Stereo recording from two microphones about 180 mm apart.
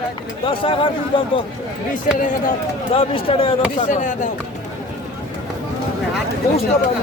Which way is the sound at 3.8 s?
45° left (ahead or behind).